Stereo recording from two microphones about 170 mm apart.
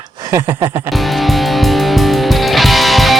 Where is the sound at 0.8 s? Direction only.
Centre (ahead or behind).